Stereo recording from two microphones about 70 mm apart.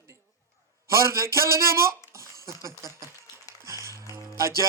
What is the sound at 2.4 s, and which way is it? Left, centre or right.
Speech, right.